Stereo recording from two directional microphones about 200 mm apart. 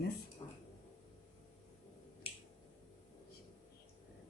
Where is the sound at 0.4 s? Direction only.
20° left (ahead or behind).